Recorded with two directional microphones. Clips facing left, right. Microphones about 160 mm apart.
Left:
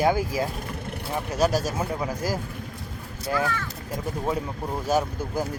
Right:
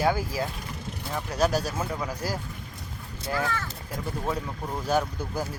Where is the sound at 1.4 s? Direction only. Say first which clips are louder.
Left 2 dB; 40° left (ahead or behind).